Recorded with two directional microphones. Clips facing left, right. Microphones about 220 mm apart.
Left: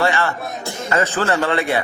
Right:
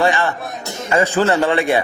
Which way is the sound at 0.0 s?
15° right (ahead or behind).